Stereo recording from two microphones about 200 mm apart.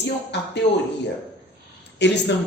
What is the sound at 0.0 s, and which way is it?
Speech, 60° left (ahead or behind).